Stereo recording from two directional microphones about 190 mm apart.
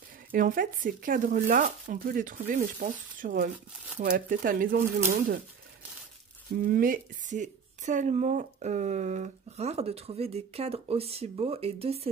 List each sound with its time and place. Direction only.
0.3 s speech: 45° right (ahead or behind)
6.6 s a woman's voice: 50° right (ahead or behind); by 12.1 s 30° right (ahead or behind)